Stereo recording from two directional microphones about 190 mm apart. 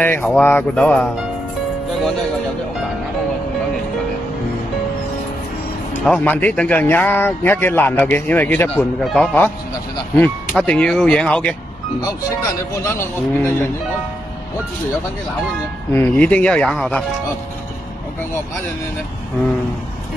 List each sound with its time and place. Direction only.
0.0 s a man's voice: 10° left (ahead or behind)
6.0 s a man's voice: 10° left (ahead or behind)
10.5 s speech: 5° left (ahead or behind)
12.0 s a man's voice: 20° left (ahead or behind)
15.9 s a man's voice: 10° left (ahead or behind)